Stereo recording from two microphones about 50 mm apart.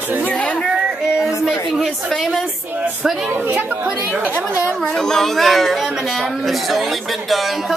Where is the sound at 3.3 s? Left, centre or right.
Right.